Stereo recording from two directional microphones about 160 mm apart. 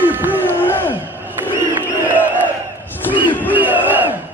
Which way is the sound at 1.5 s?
10° right (ahead or behind).